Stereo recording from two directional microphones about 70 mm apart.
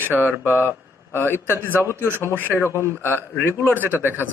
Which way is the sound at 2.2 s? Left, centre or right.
Left.